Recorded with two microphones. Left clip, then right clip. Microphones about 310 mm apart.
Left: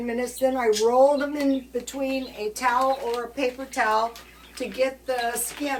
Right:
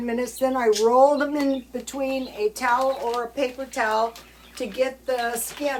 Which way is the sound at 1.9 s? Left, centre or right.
Centre.